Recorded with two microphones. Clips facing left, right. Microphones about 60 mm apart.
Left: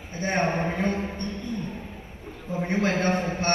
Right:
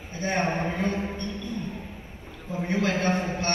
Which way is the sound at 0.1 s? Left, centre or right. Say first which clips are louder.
Left 1 dB; left.